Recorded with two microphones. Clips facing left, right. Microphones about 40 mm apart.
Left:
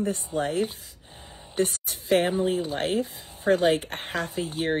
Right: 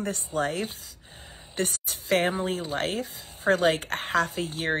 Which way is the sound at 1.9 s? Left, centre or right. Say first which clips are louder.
Even; right.